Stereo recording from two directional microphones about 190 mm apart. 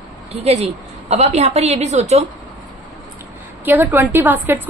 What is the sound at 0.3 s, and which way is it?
A woman's voice, 30° right (ahead or behind).